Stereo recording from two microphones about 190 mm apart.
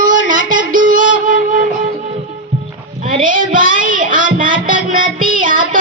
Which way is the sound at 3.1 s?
45° right (ahead or behind).